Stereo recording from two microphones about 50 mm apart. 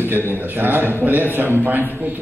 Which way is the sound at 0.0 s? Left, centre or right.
Right.